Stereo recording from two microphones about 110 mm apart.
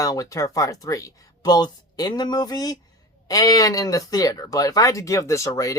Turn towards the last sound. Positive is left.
turn(degrees=30)  # may be behind; listen again after turning